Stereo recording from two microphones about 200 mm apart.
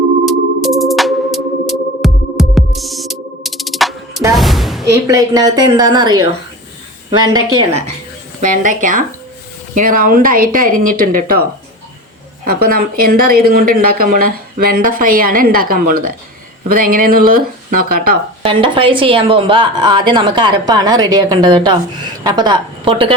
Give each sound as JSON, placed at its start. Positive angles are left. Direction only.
{"t": 0.3, "sound": "music", "side_deg": 0}
{"t": 4.9, "sound": "a woman's voice", "side_deg": -15}
{"t": 8.4, "sound": "speech", "side_deg": -40}
{"t": 12.5, "sound": "speech", "side_deg": -50}
{"t": 18.4, "sound": "a woman's voice", "side_deg": -25}